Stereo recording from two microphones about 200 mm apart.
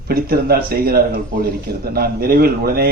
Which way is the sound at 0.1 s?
50° right (ahead or behind).